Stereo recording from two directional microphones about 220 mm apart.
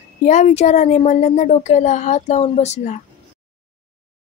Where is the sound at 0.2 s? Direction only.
30° left (ahead or behind).